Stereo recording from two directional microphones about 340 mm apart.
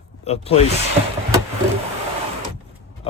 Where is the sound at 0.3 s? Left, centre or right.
Centre.